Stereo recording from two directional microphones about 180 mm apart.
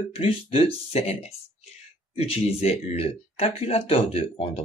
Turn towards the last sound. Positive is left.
turn(degrees=35)  # may be behind; listen again after turning